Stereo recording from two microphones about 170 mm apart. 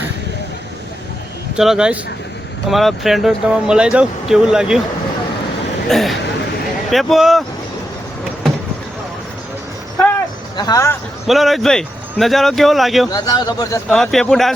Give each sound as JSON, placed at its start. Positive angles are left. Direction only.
{"t": 1.5, "sound": "speech", "side_deg": -5}
{"t": 5.9, "sound": "speech", "side_deg": 0}
{"t": 10.6, "sound": "speech", "side_deg": 20}
{"t": 11.3, "sound": "speech", "side_deg": 0}
{"t": 13.1, "sound": "speech", "side_deg": 20}
{"t": 13.9, "sound": "speech", "side_deg": 0}